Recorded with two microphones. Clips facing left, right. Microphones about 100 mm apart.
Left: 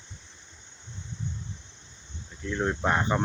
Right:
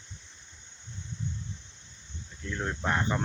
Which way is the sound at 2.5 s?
25° left (ahead or behind).